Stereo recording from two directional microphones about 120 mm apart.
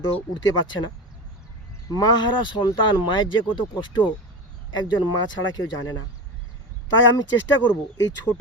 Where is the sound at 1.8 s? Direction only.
30° left (ahead or behind).